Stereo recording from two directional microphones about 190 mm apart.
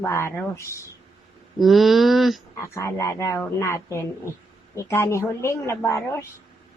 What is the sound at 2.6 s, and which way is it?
A woman's voice, 15° left (ahead or behind).